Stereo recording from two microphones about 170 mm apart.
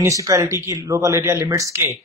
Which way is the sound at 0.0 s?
20° right (ahead or behind).